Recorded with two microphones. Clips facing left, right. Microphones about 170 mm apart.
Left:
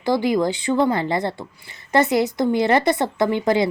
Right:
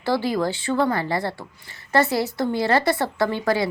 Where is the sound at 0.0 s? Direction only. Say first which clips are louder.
Left 3 dB; 15° left (ahead or behind).